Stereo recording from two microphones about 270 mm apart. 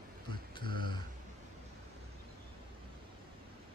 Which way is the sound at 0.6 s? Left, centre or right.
Right.